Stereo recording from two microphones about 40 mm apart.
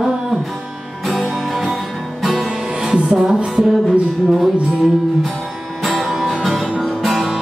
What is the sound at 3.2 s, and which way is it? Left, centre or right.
Music, right.